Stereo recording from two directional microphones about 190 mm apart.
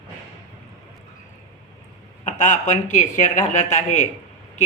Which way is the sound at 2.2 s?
40° left (ahead or behind).